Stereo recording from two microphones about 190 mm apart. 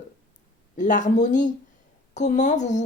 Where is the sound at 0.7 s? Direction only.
40° left (ahead or behind).